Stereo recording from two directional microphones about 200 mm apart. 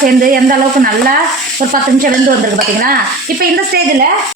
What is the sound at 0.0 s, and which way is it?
A woman's voice, 45° right (ahead or behind).